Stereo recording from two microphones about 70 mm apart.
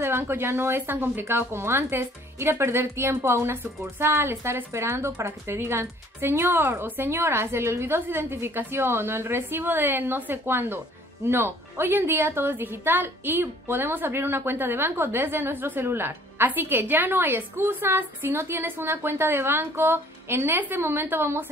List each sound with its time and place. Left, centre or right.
0.0 s speech: right